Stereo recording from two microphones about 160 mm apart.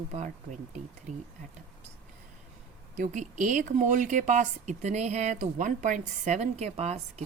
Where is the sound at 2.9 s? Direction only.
50° right (ahead or behind).